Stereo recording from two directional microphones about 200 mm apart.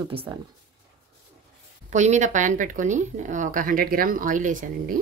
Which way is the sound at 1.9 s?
35° right (ahead or behind).